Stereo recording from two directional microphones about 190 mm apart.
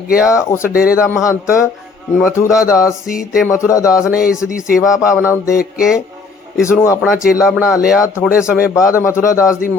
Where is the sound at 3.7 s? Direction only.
15° left (ahead or behind).